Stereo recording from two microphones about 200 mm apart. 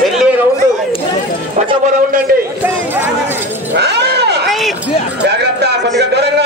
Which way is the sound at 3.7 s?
55° right (ahead or behind).